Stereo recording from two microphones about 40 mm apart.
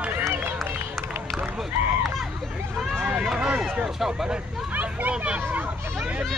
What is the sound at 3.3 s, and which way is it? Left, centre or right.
Speech, right.